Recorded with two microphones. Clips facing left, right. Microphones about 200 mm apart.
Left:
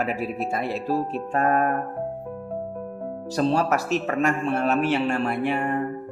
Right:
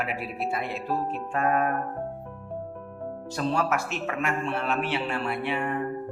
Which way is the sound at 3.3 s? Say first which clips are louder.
Left 5 dB; 35° left (ahead or behind).